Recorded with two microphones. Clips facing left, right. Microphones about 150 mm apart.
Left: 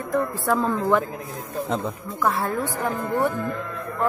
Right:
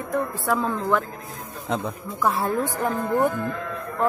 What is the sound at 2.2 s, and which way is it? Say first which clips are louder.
Speech: even; 10° right (ahead or behind).